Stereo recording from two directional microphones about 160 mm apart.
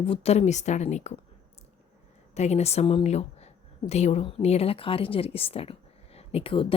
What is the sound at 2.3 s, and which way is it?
Speech, 45° left (ahead or behind).